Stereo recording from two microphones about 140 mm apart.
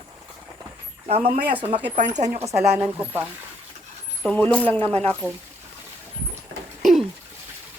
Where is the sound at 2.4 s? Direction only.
20° right (ahead or behind).